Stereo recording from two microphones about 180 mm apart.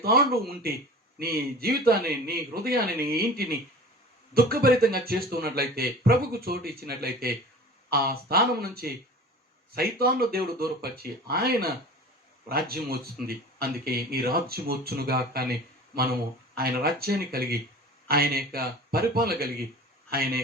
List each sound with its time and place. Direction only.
0.0 s speech: 60° right (ahead or behind)
16.6 s a man's voice: 60° right (ahead or behind)